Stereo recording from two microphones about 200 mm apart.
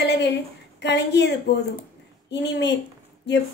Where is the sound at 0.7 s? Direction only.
60° left (ahead or behind).